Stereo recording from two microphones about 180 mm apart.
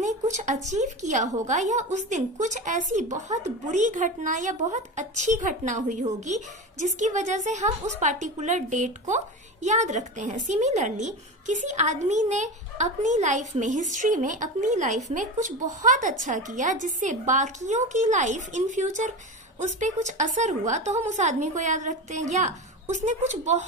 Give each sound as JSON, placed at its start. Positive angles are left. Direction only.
{"t": 0.0, "sound": "a woman's voice", "side_deg": -40}